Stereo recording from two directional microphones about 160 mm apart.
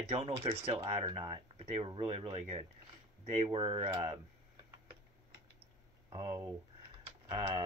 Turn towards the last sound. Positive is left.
turn(degrees=-35)  # may be behind; listen again after turning